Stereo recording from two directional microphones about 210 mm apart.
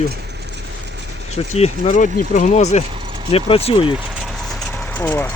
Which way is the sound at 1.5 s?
30° left (ahead or behind).